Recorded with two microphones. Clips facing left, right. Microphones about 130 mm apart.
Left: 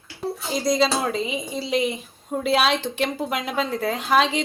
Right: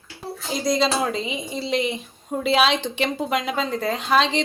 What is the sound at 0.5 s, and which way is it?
A woman's voice, centre (ahead or behind).